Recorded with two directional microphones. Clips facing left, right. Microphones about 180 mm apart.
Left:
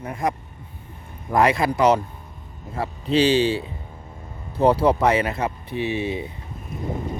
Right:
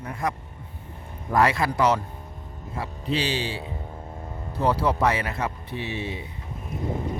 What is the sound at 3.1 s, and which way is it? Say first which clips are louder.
Speech: left 9 dB; 25° left (ahead or behind).